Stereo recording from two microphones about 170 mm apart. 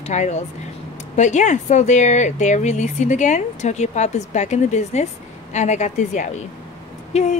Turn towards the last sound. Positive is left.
turn(degrees=40)  # may be behind; listen again after turning